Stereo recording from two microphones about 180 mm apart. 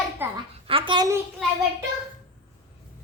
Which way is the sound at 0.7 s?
30° right (ahead or behind).